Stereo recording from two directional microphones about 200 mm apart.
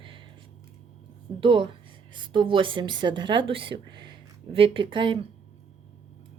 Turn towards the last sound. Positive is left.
turn(degrees=-25)  # may be behind; listen again after turning